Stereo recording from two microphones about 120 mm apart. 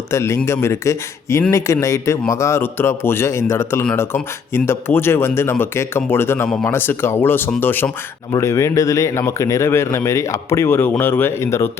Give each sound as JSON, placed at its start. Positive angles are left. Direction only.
{"t": 0.1, "sound": "speech", "side_deg": 20}